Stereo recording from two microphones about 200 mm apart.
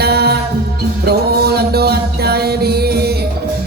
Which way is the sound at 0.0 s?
55° right (ahead or behind).